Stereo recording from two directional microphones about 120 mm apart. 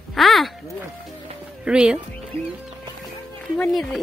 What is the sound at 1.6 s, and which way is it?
Speech, 5° right (ahead or behind).